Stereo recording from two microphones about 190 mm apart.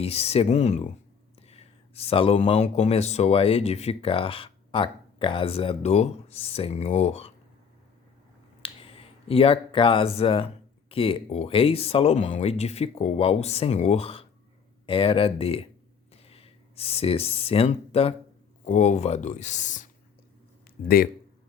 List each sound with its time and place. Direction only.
0.0 s speech: 30° left (ahead or behind)
8.6 s speech: 30° left (ahead or behind)
20.8 s speech: 50° left (ahead or behind)